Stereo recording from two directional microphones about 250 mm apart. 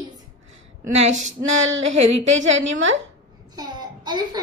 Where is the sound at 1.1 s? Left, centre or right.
Right.